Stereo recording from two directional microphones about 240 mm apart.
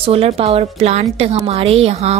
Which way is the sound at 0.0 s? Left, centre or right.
Right.